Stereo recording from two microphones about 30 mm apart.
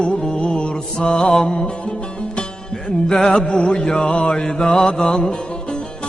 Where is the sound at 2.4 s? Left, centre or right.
Left.